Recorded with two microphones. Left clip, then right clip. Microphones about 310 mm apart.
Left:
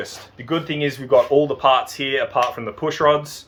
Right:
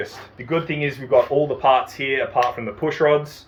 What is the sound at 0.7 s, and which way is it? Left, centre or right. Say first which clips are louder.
Speech: left 2 dB; centre.